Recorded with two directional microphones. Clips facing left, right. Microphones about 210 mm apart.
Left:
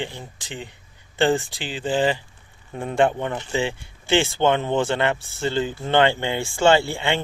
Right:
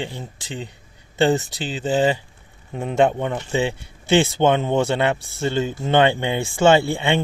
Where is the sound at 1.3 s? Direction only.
20° right (ahead or behind).